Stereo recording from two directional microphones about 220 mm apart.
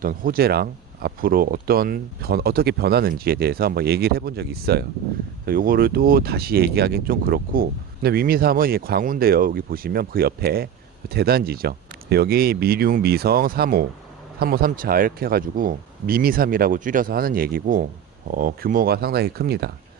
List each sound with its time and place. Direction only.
0.0 s speech: 40° right (ahead or behind)